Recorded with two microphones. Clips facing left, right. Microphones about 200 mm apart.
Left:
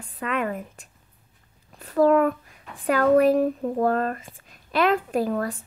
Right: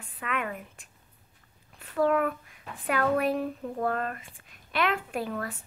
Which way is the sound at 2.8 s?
40° left (ahead or behind).